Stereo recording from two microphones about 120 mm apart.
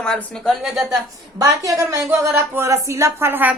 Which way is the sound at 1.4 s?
25° right (ahead or behind).